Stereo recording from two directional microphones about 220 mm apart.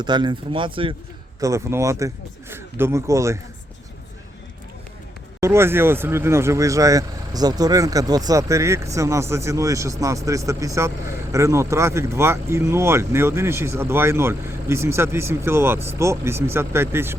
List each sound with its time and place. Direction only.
0.0 s speech: 20° right (ahead or behind)
5.4 s speech: 10° right (ahead or behind)